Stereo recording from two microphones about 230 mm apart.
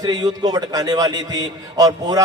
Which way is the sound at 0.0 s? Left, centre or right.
Centre.